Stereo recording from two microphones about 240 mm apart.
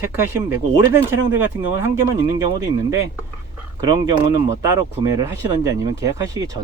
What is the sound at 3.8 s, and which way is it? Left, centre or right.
Speech, centre.